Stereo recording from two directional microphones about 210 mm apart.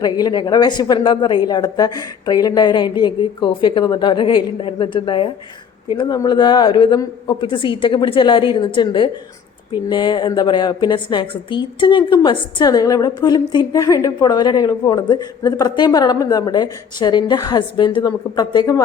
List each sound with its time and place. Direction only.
0.0 s a woman's voice: 20° left (ahead or behind)